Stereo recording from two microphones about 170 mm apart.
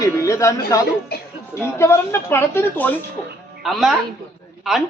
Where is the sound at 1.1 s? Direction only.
65° left (ahead or behind).